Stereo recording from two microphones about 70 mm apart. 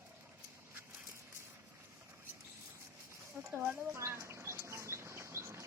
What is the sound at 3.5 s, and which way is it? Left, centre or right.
Bird, right.